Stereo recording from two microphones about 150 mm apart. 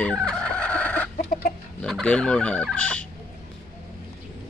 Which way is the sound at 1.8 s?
5° left (ahead or behind).